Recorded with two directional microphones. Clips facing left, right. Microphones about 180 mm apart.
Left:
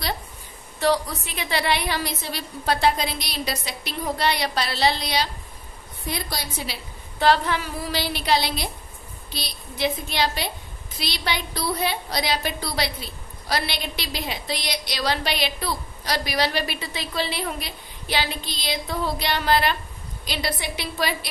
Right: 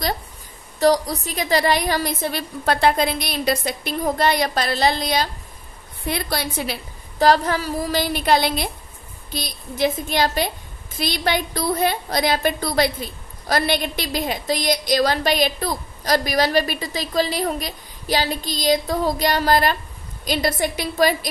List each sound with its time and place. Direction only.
0.7 s a woman's voice: 40° right (ahead or behind)
6.0 s a woman's voice: 60° right (ahead or behind)
7.2 s a woman's voice: 40° right (ahead or behind)